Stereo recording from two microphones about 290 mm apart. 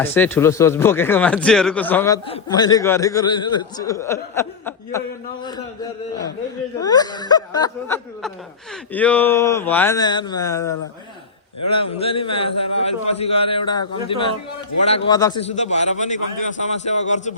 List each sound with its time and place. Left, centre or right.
0.0 s speech: centre
6.7 s speech: centre
11.9 s a man's voice: centre